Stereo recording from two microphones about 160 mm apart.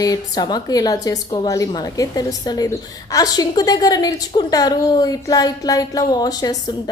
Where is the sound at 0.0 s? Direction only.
25° left (ahead or behind).